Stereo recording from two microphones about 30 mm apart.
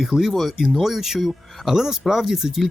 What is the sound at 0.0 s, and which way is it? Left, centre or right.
Speech, centre.